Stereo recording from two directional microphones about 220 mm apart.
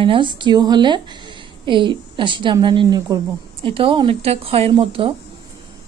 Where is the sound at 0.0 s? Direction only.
25° right (ahead or behind).